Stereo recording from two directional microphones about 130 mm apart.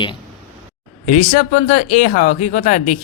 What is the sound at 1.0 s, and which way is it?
Speech, 75° left (ahead or behind).